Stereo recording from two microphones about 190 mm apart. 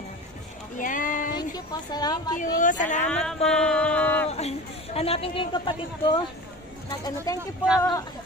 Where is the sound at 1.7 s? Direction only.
20° left (ahead or behind).